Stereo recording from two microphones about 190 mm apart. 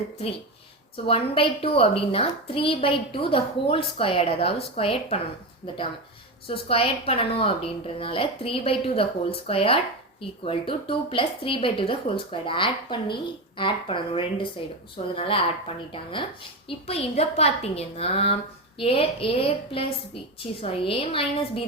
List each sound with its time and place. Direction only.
1.0 s a woman's voice: 30° left (ahead or behind)